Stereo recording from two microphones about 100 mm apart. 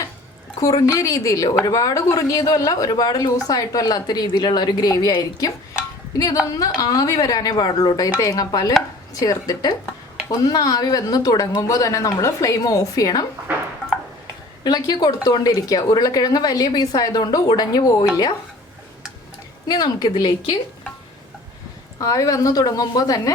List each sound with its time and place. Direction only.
0.6 s speech: 35° left (ahead or behind)
6.5 s speech: 35° left (ahead or behind)
14.6 s speech: 45° left (ahead or behind)
19.6 s speech: 40° left (ahead or behind)
21.9 s speech: 35° left (ahead or behind)